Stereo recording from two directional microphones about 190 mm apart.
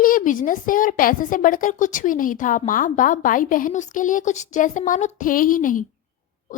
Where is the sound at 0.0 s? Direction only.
45° left (ahead or behind).